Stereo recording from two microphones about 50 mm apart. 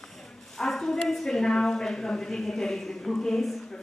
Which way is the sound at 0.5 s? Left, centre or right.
Centre.